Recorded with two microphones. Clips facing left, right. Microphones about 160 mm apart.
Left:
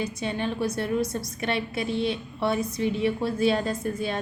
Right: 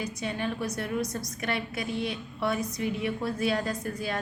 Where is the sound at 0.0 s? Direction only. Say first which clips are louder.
Left 3 dB; 30° left (ahead or behind).